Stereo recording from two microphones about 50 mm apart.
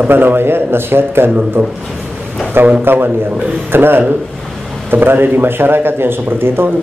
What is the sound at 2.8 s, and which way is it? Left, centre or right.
Speech, right.